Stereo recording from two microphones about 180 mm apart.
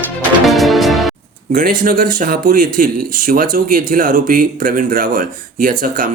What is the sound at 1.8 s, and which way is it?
Speech, 50° right (ahead or behind).